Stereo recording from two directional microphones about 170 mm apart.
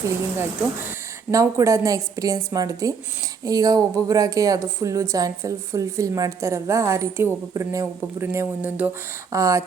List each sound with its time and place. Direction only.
0.9 s a man's voice: 20° right (ahead or behind)